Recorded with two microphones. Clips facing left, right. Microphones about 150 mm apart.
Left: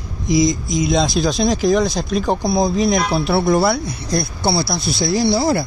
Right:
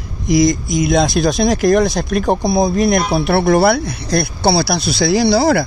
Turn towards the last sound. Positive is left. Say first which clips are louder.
# right 4 dB
turn(degrees=-75)  # may be behind; listen again after turning